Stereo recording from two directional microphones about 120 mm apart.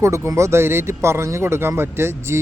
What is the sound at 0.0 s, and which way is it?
Speech, 25° right (ahead or behind).